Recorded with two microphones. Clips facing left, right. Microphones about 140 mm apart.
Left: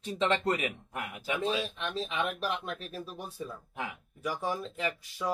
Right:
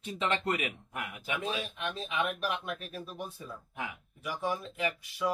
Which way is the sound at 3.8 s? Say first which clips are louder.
Left 4 dB; 35° left (ahead or behind).